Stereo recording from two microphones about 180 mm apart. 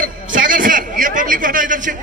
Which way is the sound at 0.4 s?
50° right (ahead or behind).